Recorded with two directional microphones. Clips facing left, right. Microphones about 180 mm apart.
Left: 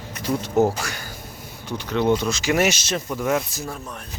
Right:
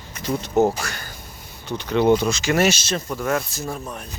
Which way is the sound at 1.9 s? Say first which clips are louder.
Right 3 dB; centre (ahead or behind).